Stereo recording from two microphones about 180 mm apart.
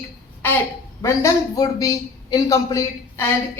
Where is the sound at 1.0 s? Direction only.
15° left (ahead or behind).